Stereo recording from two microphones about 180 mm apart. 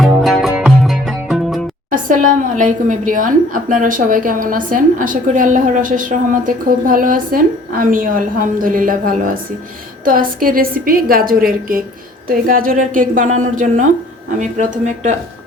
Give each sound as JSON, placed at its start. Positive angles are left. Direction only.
{"t": 0.0, "sound": "music", "side_deg": 0}
{"t": 1.9, "sound": "a woman's voice", "side_deg": -50}